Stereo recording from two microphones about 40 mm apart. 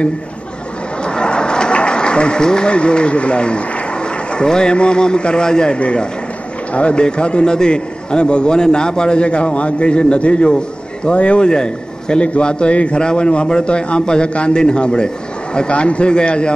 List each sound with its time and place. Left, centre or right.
1.0 s a man's voice: left